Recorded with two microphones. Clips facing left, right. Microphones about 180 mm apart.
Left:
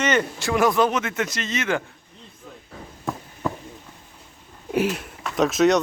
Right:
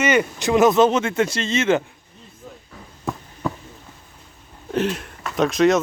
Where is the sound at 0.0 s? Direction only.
10° right (ahead or behind); by 1.8 s 25° right (ahead or behind).